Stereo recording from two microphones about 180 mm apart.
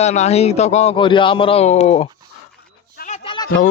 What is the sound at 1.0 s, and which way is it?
Speech, 25° left (ahead or behind).